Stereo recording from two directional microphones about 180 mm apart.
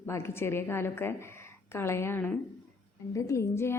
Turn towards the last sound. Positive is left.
turn(degrees=15)  # may be behind; listen again after turning